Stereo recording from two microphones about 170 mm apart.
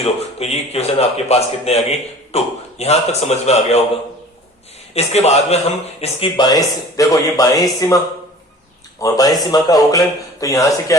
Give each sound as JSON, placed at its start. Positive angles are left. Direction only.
{"t": 0.0, "sound": "a man's voice", "side_deg": 40}
{"t": 4.9, "sound": "a man's voice", "side_deg": 40}